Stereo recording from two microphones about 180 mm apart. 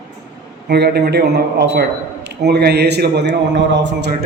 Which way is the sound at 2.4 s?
65° right (ahead or behind).